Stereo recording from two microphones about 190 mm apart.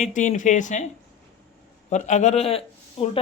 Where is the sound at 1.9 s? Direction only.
40° left (ahead or behind).